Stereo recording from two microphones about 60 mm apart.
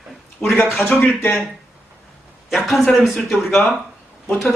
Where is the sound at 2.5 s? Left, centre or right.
Centre.